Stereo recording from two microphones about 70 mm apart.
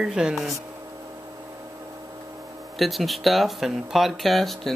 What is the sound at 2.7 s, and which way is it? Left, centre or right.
Speech, centre.